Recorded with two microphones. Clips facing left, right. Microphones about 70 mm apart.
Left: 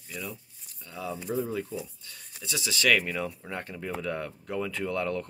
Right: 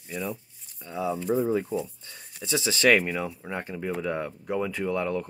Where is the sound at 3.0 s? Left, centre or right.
Centre.